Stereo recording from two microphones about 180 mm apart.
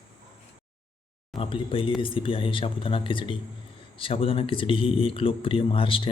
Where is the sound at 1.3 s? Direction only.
30° left (ahead or behind).